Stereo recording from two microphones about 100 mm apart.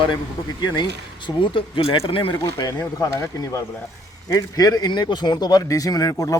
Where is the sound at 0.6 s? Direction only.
45° left (ahead or behind).